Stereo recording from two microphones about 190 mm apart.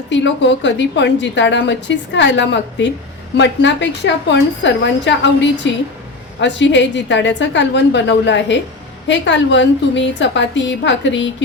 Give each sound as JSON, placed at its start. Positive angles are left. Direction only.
{"t": 0.1, "sound": "a woman's voice", "side_deg": 70}